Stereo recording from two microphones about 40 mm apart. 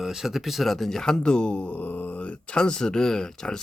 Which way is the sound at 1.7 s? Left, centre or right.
Left.